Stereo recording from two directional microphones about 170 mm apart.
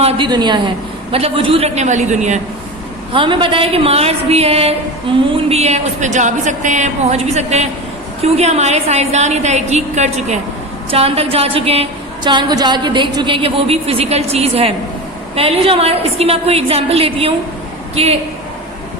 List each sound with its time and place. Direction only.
0.0 s a woman's voice: 25° right (ahead or behind); by 2.4 s 45° right (ahead or behind)
3.1 s a woman's voice: 30° right (ahead or behind)